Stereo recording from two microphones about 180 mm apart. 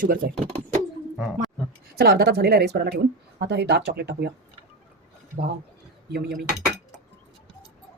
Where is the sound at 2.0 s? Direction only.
60° right (ahead or behind).